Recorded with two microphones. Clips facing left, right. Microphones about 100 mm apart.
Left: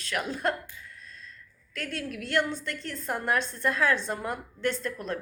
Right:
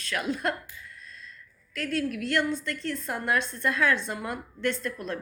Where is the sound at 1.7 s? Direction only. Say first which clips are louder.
Right 6 dB; 30° left (ahead or behind).